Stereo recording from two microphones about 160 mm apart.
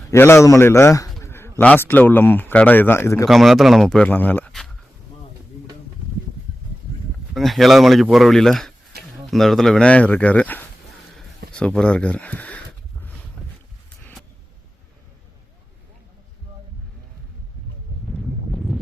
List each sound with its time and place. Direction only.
0.1 s speech: 15° left (ahead or behind)
3.2 s speech: centre (ahead or behind)
7.3 s speech: centre (ahead or behind)
14.0 s vehicle: centre (ahead or behind)
18.5 s a sound: centre (ahead or behind)